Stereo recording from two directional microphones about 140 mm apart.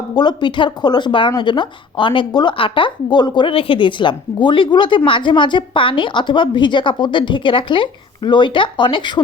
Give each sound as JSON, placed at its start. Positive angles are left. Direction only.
{"t": 0.1, "sound": "a woman's voice", "side_deg": 30}